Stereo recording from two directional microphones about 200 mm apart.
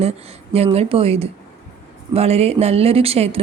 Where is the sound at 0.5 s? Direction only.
30° right (ahead or behind).